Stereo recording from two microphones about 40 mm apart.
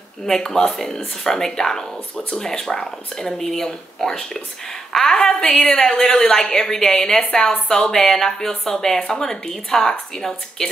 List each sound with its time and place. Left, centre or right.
0.3 s speech: centre